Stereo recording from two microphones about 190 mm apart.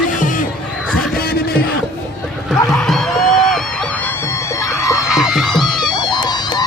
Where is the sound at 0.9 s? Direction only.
55° left (ahead or behind).